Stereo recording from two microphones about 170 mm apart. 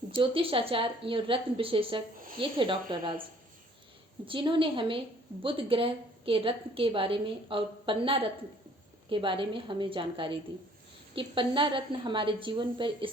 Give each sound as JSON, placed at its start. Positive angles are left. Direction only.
{"t": 0.2, "sound": "a woman's voice", "side_deg": -30}
{"t": 2.1, "sound": "a woman's voice", "side_deg": -55}
{"t": 2.4, "sound": "a woman's voice", "side_deg": -30}
{"t": 4.3, "sound": "a woman's voice", "side_deg": -30}